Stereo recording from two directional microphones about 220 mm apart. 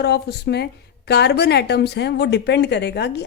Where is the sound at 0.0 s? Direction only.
50° left (ahead or behind).